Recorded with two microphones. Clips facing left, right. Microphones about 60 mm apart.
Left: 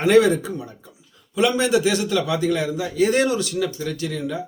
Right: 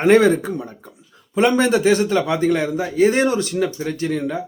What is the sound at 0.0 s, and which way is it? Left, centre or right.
Speech, right.